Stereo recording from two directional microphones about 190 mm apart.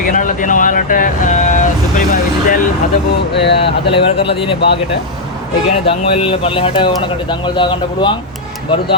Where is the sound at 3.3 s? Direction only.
60° left (ahead or behind).